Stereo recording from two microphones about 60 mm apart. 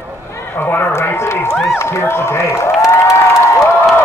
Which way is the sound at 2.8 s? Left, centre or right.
Left.